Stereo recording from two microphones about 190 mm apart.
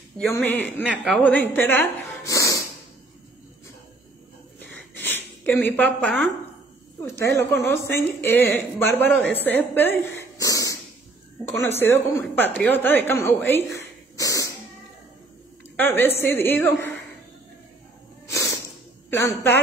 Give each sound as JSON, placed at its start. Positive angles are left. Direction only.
{"t": 0.2, "sound": "a man's voice", "side_deg": 0}
{"t": 4.9, "sound": "a sound", "side_deg": 10}
{"t": 7.0, "sound": "a woman's voice", "side_deg": 15}
{"t": 14.1, "sound": "cat", "side_deg": 15}
{"t": 15.7, "sound": "a woman's voice", "side_deg": 10}
{"t": 18.2, "sound": "a sound", "side_deg": 15}
{"t": 19.0, "sound": "a woman's voice", "side_deg": 10}